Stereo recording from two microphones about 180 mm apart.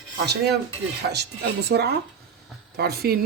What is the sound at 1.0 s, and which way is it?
Speech, 65° right (ahead or behind).